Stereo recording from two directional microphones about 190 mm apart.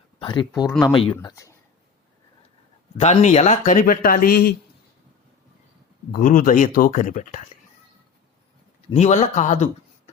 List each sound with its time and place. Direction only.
0.2 s speech: 25° left (ahead or behind)
3.0 s speech: 35° left (ahead or behind); by 4.5 s 50° left (ahead or behind)
6.1 s speech: 45° left (ahead or behind)
8.9 s speech: 35° left (ahead or behind)